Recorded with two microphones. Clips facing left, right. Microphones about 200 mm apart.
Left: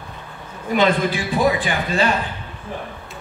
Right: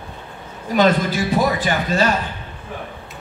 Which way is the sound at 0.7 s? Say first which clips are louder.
Right 2 dB; 40° right (ahead or behind).